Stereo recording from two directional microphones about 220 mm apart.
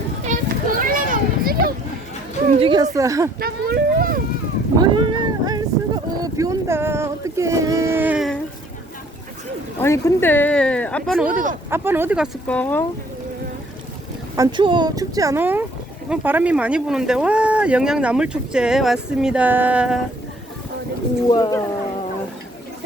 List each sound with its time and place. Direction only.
0.3 s children playing: 40° right (ahead or behind)
2.6 s speech: 20° right (ahead or behind)
3.4 s speech: 45° right (ahead or behind)
4.8 s a sound: 20° right (ahead or behind)
6.1 s boat: 15° right (ahead or behind)
9.8 s speech: 10° left (ahead or behind)
14.3 s speech: 20° right (ahead or behind)
21.2 s speech: 20° left (ahead or behind)